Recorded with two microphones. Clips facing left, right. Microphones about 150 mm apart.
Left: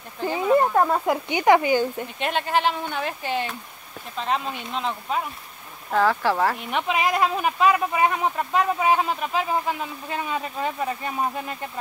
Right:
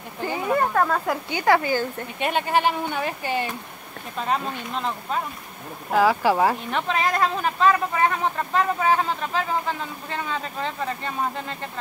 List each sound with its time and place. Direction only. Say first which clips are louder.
0.5 s speech: left 3 dB; 20° left (ahead or behind)
2.1 s speech: right 2 dB; 5° right (ahead or behind)
6.7 s speech: left 1 dB; 10° left (ahead or behind)